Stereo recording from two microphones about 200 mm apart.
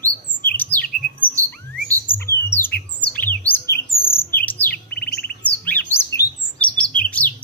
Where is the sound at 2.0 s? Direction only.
10° left (ahead or behind).